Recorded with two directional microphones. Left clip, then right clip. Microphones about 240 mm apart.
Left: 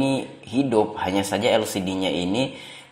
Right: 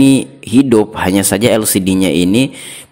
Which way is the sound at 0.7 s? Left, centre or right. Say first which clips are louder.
Right 9 dB; right.